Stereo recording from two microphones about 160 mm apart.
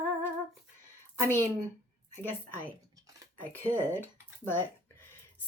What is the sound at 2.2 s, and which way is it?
A woman's voice, 10° left (ahead or behind).